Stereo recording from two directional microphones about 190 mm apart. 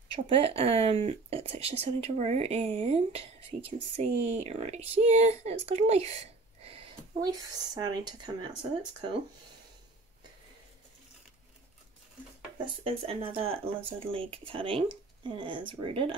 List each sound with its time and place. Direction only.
0.1 s speech: 30° right (ahead or behind)
12.5 s speech: 30° right (ahead or behind)